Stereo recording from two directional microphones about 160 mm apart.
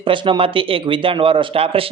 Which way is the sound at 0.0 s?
30° right (ahead or behind).